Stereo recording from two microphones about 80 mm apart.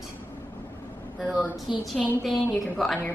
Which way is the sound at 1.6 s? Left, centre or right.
Centre.